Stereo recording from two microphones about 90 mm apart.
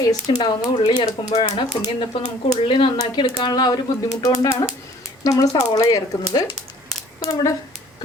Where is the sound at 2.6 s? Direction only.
75° left (ahead or behind); by 3.7 s 50° left (ahead or behind).